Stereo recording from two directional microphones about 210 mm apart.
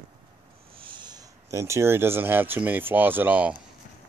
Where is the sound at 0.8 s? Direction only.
20° right (ahead or behind).